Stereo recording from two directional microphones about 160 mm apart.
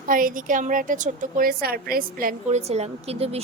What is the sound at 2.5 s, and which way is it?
Speech, 45° right (ahead or behind).